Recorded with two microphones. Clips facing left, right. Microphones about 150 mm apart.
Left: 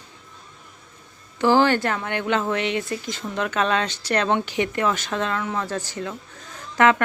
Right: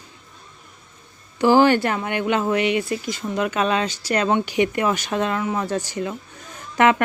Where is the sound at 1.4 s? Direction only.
15° right (ahead or behind).